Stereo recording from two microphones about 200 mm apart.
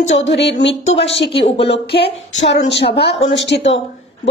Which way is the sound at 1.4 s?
30° left (ahead or behind).